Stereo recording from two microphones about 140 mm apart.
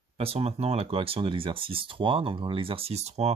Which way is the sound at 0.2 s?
45° right (ahead or behind).